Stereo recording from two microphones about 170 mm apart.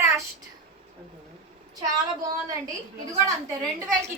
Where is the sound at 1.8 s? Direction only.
20° right (ahead or behind).